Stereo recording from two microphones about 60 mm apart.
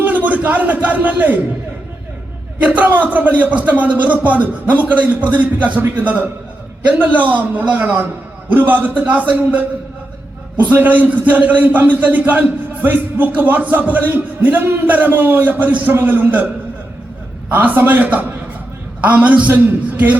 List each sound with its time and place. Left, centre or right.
0.0 s a sound: right
2.6 s a man's voice: right
17.5 s a man's voice: right